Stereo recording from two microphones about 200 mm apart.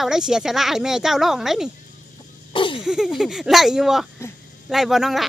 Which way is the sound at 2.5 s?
25° left (ahead or behind).